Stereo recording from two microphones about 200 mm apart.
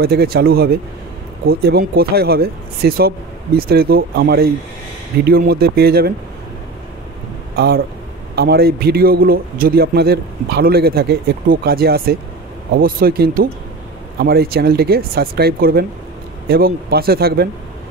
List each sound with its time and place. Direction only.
0.0 s a man's voice: 50° right (ahead or behind)
7.5 s a man's voice: 50° right (ahead or behind)